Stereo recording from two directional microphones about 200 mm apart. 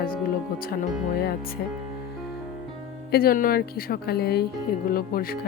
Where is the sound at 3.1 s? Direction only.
50° left (ahead or behind).